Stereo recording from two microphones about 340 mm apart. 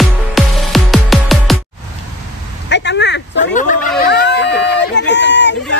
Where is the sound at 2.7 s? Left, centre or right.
Left.